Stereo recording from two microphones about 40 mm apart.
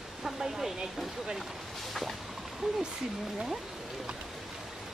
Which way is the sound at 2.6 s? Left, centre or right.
Centre.